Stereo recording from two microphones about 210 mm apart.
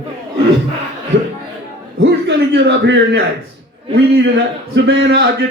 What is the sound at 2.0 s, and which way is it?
Speech, 60° right (ahead or behind).